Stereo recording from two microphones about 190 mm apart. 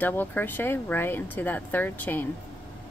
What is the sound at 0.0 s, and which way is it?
Speech, 10° left (ahead or behind).